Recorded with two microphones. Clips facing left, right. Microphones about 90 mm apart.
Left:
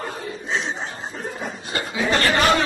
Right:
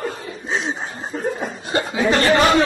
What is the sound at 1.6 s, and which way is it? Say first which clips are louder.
Chuckle: right 6 dB; 25° right (ahead or behind).